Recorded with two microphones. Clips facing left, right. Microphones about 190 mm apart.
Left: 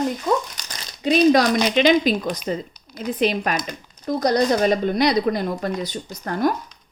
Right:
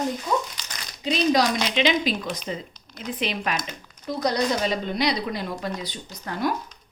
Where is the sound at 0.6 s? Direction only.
45° left (ahead or behind).